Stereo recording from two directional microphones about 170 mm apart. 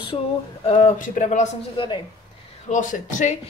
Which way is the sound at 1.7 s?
30° left (ahead or behind).